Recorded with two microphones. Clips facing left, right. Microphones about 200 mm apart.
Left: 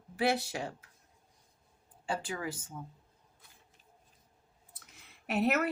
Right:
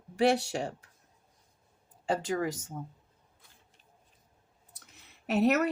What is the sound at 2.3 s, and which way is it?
Speech, 35° right (ahead or behind).